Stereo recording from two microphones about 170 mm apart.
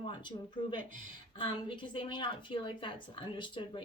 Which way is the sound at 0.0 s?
25° left (ahead or behind).